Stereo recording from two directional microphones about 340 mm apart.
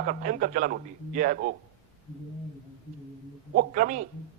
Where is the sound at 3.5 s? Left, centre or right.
Right.